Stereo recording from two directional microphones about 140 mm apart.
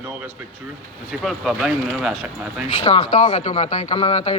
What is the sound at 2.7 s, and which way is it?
A man's voice, 45° left (ahead or behind).